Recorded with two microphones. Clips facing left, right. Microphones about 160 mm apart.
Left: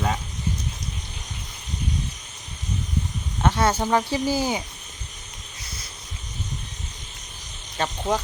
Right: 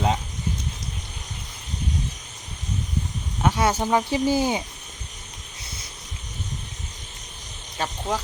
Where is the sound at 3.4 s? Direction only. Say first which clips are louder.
Even; 15° right (ahead or behind).